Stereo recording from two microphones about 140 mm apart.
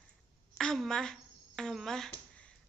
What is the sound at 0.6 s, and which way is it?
A woman's voice, centre (ahead or behind).